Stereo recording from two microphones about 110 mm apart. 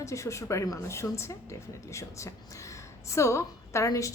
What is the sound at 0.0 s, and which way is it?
A woman's voice, 30° left (ahead or behind).